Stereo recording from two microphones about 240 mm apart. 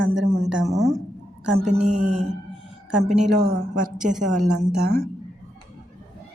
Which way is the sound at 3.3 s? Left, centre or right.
Right.